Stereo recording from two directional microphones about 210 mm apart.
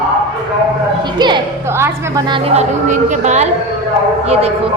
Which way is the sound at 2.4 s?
35° right (ahead or behind).